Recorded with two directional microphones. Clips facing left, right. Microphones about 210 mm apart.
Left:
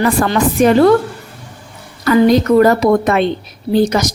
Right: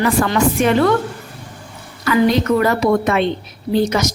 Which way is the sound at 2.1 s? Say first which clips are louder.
Left 4 dB; 40° left (ahead or behind).